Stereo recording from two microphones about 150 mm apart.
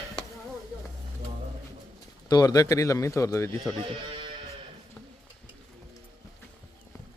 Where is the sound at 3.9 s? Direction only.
35° right (ahead or behind).